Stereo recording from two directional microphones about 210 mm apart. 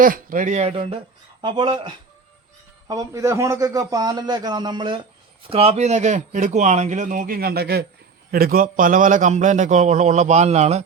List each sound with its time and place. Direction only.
0.0 s a man's voice: 40° right (ahead or behind)